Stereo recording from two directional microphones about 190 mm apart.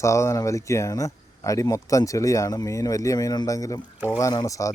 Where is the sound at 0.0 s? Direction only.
15° left (ahead or behind).